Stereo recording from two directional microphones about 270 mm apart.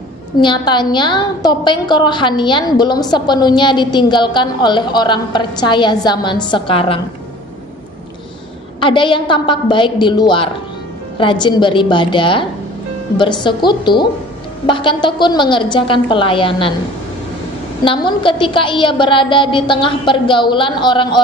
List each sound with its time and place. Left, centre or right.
0.4 s a woman's voice: centre
8.7 s a woman's voice: centre
17.8 s a woman's voice: centre